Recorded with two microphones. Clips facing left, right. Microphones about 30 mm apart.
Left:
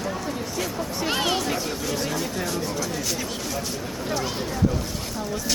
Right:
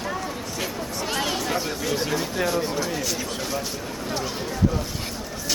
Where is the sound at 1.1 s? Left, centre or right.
Centre.